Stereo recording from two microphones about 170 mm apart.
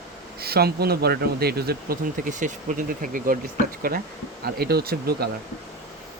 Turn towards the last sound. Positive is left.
turn(degrees=-65)  # may be behind; listen again after turning